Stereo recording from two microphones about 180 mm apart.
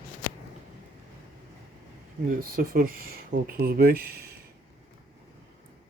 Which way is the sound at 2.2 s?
50° right (ahead or behind).